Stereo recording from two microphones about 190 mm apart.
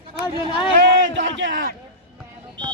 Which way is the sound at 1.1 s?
75° right (ahead or behind).